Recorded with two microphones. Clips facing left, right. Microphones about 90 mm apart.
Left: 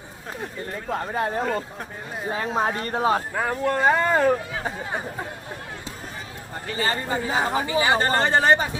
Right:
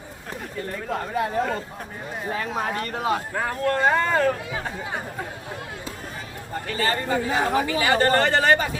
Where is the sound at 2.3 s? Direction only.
25° left (ahead or behind).